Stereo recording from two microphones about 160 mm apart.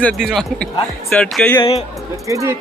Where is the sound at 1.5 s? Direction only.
35° left (ahead or behind).